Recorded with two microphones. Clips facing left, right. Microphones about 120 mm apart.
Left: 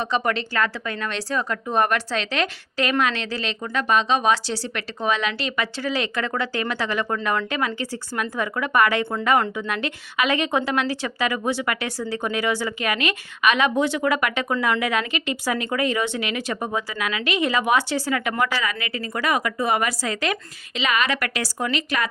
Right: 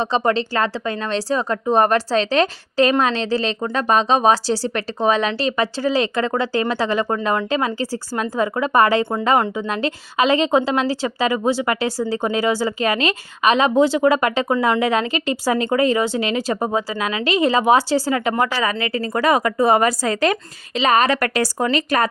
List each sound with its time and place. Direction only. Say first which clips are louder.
0.0 s a woman's voice: right 5 dB; 30° right (ahead or behind)